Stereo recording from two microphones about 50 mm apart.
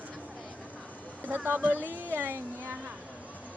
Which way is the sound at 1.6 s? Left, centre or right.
Right.